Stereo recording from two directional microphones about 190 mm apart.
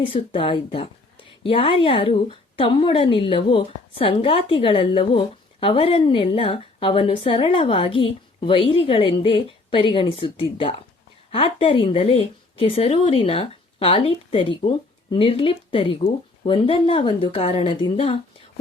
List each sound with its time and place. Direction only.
0.0 s a woman's voice: 30° left (ahead or behind)